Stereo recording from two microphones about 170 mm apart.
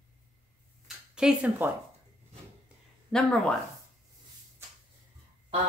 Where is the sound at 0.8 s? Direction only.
5° right (ahead or behind).